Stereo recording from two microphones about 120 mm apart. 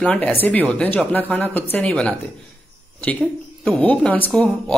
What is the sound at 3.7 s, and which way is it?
Speech, 10° left (ahead or behind).